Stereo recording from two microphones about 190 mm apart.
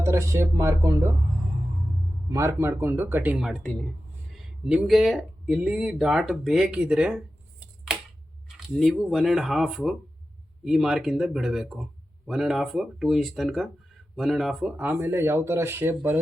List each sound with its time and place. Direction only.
0.0 s speech: 15° right (ahead or behind)
2.3 s speech: 15° right (ahead or behind); by 3.8 s 5° left (ahead or behind)
4.3 s speech: 5° right (ahead or behind)
8.7 s speech: centre (ahead or behind)